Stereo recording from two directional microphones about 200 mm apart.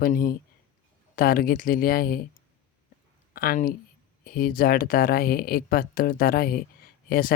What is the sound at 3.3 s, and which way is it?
Speech, 45° left (ahead or behind).